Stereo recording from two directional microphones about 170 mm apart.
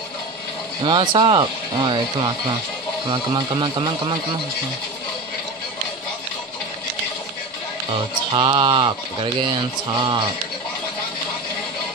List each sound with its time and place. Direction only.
0.8 s speech: 30° right (ahead or behind)
8.3 s speech: 30° right (ahead or behind)